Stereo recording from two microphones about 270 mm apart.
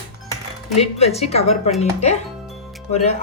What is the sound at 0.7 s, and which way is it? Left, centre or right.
Speech, left.